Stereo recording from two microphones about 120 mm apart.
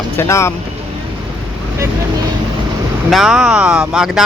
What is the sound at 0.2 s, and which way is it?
Speech, 25° left (ahead or behind).